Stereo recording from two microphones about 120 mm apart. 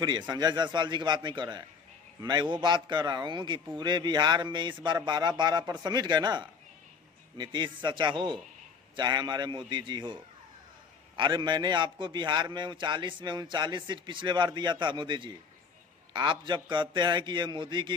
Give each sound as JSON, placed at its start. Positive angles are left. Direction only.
{"t": 0.0, "sound": "a man's voice", "side_deg": -35}
{"t": 11.2, "sound": "a man's voice", "side_deg": -40}